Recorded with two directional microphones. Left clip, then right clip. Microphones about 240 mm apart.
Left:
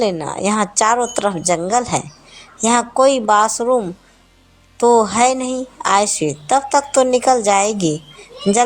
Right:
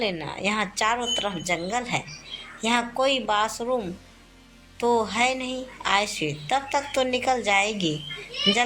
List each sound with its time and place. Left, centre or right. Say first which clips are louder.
0.0 s a woman's voice: left 9 dB; left